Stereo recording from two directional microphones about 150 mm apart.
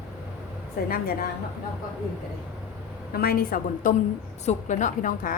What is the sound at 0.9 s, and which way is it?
Speech, 80° left.